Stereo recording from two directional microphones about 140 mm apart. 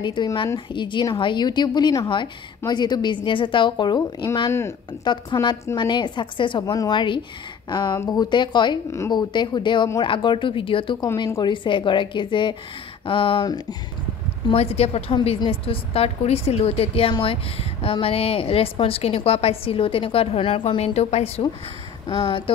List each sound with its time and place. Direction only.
0.0 s a woman's voice: 30° left (ahead or behind)
5.0 s a woman's voice: 35° left (ahead or behind)
8.9 s a woman's voice: 20° left (ahead or behind)
9.3 s a woman's voice: 35° left (ahead or behind)
11.2 s a woman's voice: 25° left (ahead or behind)
11.5 s a woman's voice: 35° left (ahead or behind)
14.5 s a woman's voice: 45° left (ahead or behind)
22.0 s speech: 35° left (ahead or behind)